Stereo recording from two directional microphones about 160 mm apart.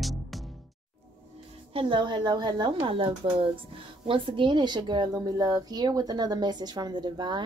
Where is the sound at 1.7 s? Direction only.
30° right (ahead or behind).